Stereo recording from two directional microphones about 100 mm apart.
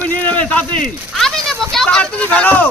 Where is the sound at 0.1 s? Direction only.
15° left (ahead or behind).